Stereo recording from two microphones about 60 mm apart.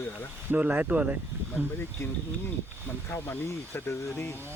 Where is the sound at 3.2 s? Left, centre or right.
Left.